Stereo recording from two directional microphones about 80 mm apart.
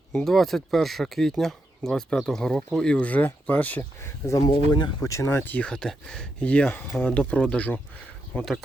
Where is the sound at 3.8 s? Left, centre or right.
Left.